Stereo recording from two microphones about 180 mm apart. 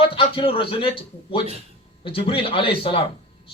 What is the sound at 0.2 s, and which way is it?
Speech, 30° left (ahead or behind).